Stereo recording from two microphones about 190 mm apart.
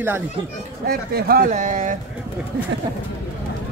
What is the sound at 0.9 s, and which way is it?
Speech, 50° right (ahead or behind).